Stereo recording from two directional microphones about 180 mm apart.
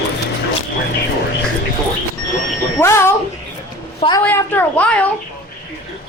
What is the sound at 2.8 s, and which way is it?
Speech, 15° left (ahead or behind).